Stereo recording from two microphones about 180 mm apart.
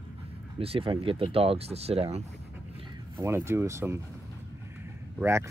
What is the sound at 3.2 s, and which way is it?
Speech, 15° right (ahead or behind).